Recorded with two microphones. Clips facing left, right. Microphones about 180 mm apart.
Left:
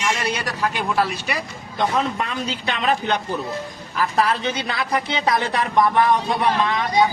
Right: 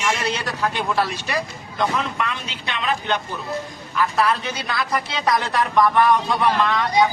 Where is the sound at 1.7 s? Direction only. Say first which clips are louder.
Left 2 dB; 35° left (ahead or behind).